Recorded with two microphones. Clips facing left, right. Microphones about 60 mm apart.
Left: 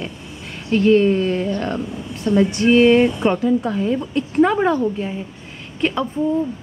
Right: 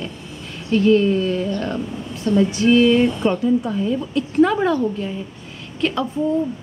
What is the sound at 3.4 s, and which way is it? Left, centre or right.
Speech, left.